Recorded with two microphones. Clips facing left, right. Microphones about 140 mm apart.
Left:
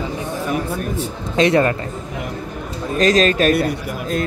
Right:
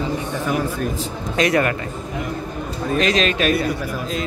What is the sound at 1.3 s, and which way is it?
Speech, 25° left (ahead or behind).